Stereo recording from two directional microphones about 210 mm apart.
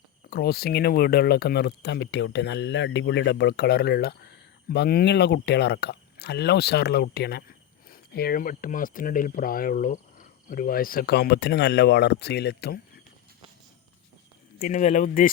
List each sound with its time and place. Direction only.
0.3 s speech: 50° left (ahead or behind)
14.6 s speech: 35° left (ahead or behind)